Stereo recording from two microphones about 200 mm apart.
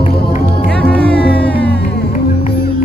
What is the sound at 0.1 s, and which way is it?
Music, 55° left (ahead or behind).